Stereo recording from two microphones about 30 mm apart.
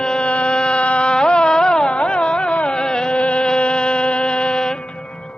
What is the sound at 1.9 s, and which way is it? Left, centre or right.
Carnatic music, left.